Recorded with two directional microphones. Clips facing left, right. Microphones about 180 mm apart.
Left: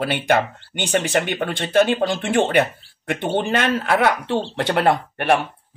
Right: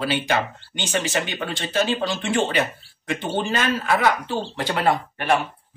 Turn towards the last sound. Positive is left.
turn(degrees=60)  # may be behind; listen again after turning